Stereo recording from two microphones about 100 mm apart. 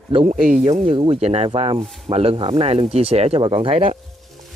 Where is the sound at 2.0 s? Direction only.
70° right (ahead or behind).